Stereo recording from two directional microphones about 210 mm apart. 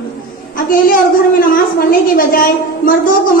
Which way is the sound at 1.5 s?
40° left (ahead or behind).